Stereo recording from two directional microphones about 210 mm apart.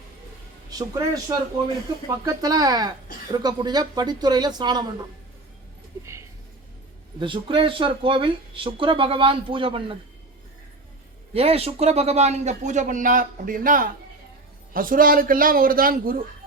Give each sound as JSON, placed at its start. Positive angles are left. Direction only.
{"t": 0.7, "sound": "a man's voice", "side_deg": -15}
{"t": 7.2, "sound": "speech", "side_deg": -25}
{"t": 11.3, "sound": "a man's voice", "side_deg": -30}